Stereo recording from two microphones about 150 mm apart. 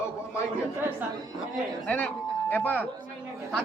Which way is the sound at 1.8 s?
10° left (ahead or behind).